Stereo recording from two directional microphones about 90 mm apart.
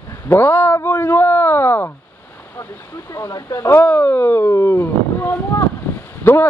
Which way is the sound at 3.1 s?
35° left (ahead or behind).